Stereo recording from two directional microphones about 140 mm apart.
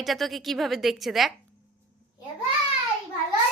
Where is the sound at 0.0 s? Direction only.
Centre (ahead or behind).